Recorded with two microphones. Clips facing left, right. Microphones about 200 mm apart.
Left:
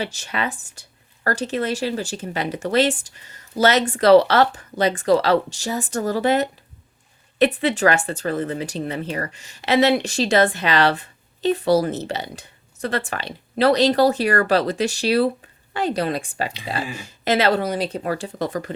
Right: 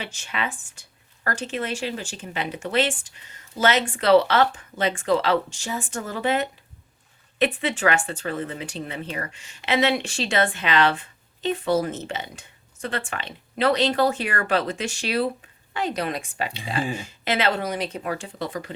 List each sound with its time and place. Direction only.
0.0 s speech: 40° left (ahead or behind)